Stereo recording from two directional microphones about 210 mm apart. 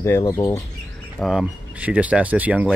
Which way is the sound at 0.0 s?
15° left (ahead or behind).